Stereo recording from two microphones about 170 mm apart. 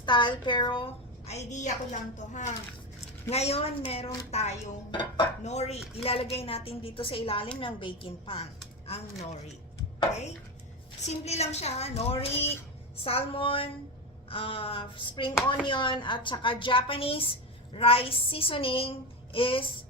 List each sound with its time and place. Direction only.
0.0 s a woman's voice: 25° left (ahead or behind)
1.3 s a woman's voice: 45° left (ahead or behind)
4.9 s a woman's voice: 25° left (ahead or behind)
5.5 s a child's voice: 40° left (ahead or behind)
11.1 s a child's voice: 40° left (ahead or behind)